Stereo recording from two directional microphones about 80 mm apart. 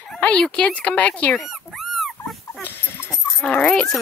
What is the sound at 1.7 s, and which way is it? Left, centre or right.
Dog, centre.